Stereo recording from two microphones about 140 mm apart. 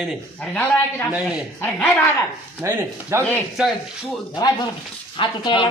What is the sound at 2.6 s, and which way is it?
Speech, 15° right (ahead or behind).